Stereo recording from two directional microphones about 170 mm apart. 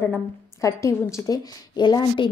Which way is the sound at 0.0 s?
15° left (ahead or behind).